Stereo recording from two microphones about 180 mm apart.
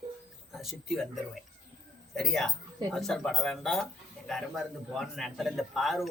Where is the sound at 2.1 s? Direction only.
Centre (ahead or behind).